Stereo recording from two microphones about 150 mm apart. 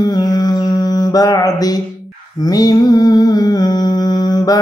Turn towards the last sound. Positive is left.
turn(degrees=25)  # may be behind; listen again after turning